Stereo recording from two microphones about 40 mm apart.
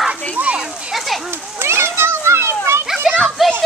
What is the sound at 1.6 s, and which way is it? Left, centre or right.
Children playing, right.